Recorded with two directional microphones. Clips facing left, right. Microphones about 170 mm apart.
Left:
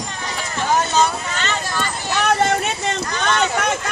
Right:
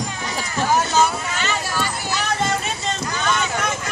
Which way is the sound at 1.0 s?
10° right (ahead or behind).